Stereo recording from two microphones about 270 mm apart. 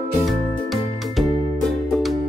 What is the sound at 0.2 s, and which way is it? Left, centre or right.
Music, centre.